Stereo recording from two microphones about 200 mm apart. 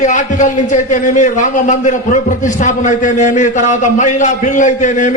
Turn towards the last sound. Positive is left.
turn(degrees=40)  # may be behind; listen again after turning